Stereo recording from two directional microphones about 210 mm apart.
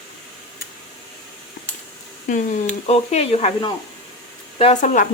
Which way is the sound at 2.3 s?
30° left (ahead or behind).